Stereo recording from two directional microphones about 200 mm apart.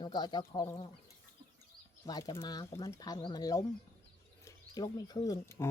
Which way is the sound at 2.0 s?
20° left (ahead or behind).